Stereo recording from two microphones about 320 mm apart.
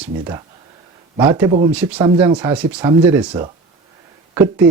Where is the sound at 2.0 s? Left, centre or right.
Centre.